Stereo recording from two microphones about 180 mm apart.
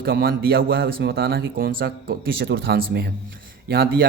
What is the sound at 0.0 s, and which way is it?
Speech, 55° right (ahead or behind).